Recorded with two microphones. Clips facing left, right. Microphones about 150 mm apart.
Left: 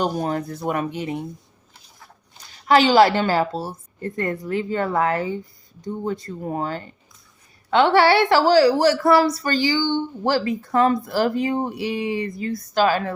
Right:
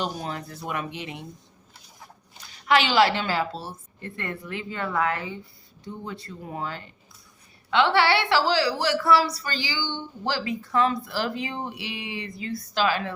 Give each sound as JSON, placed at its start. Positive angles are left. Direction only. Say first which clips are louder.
{"t": 0.0, "sound": "a woman's voice", "louder": "left 8 dB", "side_deg": 45}
{"t": 2.6, "sound": "a woman's voice", "louder": "left 6 dB", "side_deg": 40}